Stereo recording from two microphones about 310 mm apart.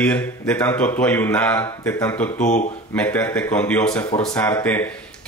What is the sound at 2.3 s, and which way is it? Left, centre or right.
Speech, left.